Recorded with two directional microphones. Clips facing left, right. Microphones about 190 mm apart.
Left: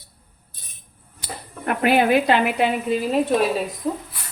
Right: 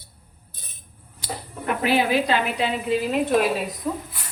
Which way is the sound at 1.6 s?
55° left (ahead or behind).